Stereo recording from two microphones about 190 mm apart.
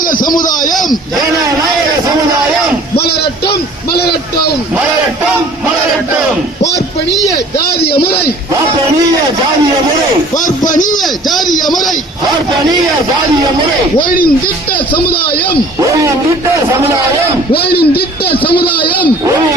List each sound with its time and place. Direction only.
0.0 s a sound: 45° left (ahead or behind)
0.7 s a man's voice: centre (ahead or behind)
7.8 s a sound: 55° left (ahead or behind)
10.7 s a man's voice: 45° left (ahead or behind)
10.9 s a man's voice: centre (ahead or behind)
14.0 s speech: 50° left (ahead or behind)
15.8 s speech: 15° right (ahead or behind)
17.5 s a man's voice: 55° left (ahead or behind)
18.3 s speech: 25° left (ahead or behind)